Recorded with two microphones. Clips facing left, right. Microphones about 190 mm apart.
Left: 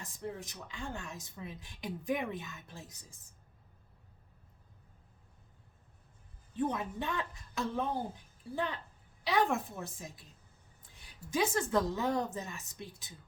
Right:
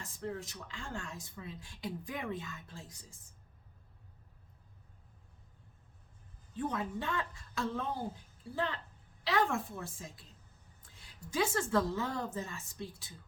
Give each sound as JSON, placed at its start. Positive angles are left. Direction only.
{"t": 0.0, "sound": "speech", "side_deg": 15}
{"t": 6.6, "sound": "a woman's voice", "side_deg": 20}
{"t": 11.3, "sound": "a woman's voice", "side_deg": 20}